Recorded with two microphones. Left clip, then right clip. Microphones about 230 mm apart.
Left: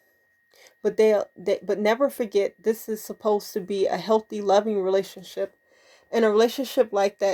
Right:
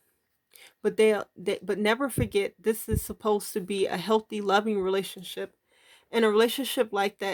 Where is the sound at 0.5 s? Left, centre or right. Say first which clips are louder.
Left 3 dB; right.